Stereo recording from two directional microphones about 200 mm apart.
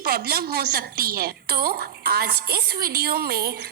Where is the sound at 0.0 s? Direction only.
50° right (ahead or behind).